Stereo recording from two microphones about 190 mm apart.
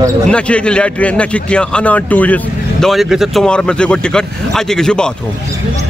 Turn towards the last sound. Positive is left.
turn(degrees=5)  # may be behind; listen again after turning